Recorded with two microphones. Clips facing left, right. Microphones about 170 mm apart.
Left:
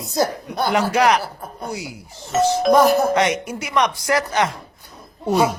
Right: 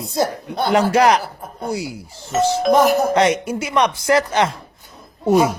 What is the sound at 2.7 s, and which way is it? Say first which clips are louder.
Speech: even; 15° right (ahead or behind).